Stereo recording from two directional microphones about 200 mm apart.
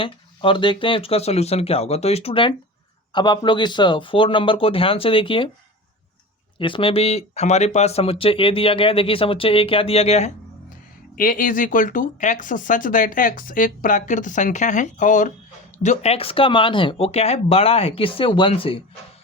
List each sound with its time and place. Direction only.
0.0 s speech: 25° left (ahead or behind)
6.6 s speech: 25° left (ahead or behind)
11.2 s speech: 45° left (ahead or behind); by 18.8 s 25° left (ahead or behind)